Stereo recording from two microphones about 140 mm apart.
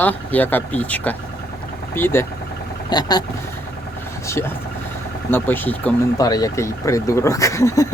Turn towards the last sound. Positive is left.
turn(degrees=20)  # may be behind; listen again after turning